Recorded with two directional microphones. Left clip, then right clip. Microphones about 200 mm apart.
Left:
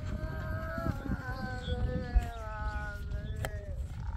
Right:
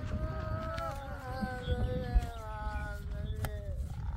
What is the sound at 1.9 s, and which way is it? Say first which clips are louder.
Music: even; 60° right (ahead or behind).